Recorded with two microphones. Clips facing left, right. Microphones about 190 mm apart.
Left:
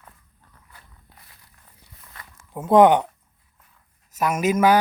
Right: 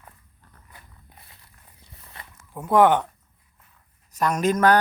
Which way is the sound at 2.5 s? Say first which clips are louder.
Left 3 dB; 20° left (ahead or behind).